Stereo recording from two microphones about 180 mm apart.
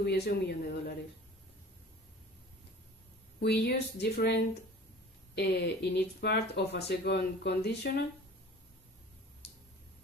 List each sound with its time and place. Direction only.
0.0 s speech: 65° left (ahead or behind)
3.3 s speech: 65° left (ahead or behind)